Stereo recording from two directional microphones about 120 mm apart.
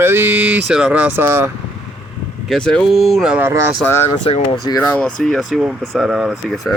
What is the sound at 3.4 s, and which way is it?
Speech, 20° right (ahead or behind).